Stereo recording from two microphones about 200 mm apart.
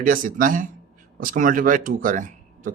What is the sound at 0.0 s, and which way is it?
Speech, 45° right (ahead or behind).